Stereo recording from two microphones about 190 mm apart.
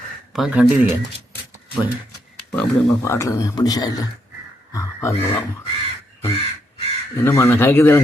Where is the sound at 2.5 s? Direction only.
10° left (ahead or behind).